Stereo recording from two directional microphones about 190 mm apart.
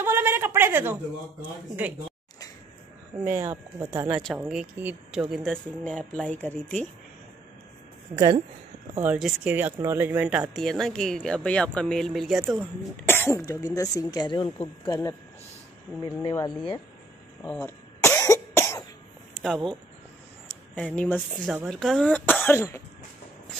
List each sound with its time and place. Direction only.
0.0 s a sound: 10° right (ahead or behind)
3.3 s speech: 15° right (ahead or behind); by 6.9 s 10° left (ahead or behind)
8.1 s speech: 45° right (ahead or behind)
9.0 s speech: 5° right (ahead or behind)
13.0 s speech: 10° left (ahead or behind)
16.2 s speech: 20° left (ahead or behind)
17.5 s cough: 10° left (ahead or behind)
19.4 s speech: 5° left (ahead or behind)